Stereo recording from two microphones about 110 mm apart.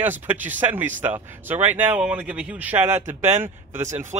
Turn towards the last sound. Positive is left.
turn(degrees=-20)  # may be behind; listen again after turning